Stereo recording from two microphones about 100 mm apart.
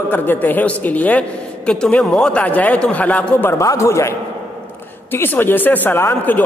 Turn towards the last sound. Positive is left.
turn(degrees=20)  # may be behind; listen again after turning